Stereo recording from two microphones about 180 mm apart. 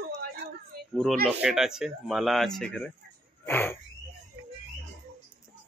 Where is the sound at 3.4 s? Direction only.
10° left (ahead or behind).